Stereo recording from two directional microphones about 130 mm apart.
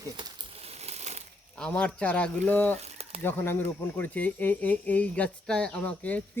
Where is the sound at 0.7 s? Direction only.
55° right (ahead or behind).